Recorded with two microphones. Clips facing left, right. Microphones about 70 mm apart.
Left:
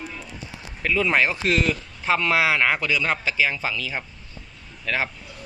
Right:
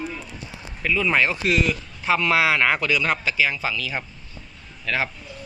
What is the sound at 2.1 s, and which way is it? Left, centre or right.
Speech, left.